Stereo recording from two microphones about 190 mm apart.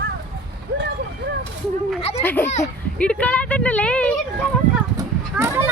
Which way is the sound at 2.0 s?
30° left (ahead or behind).